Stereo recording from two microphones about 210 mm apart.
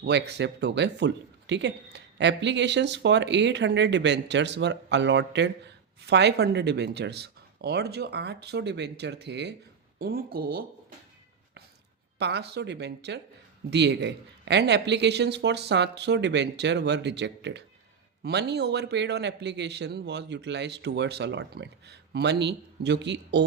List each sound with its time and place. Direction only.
0.0 s a man's voice: 55° right (ahead or behind)
12.2 s a man's voice: 50° right (ahead or behind)